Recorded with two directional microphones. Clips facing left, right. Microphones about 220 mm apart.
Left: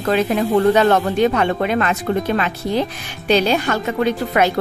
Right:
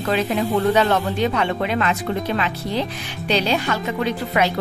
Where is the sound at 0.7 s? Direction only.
50° left (ahead or behind).